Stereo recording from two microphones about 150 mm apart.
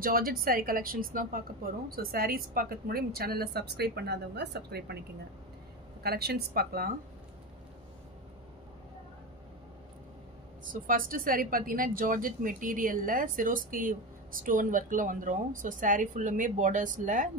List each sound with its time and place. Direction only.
0.0 s a woman's voice: 75° right (ahead or behind)
6.0 s a woman's voice: 90° right
10.6 s a woman's voice: 65° right (ahead or behind)